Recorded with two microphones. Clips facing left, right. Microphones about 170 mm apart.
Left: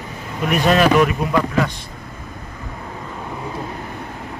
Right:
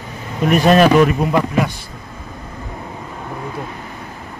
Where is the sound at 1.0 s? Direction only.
25° right (ahead or behind).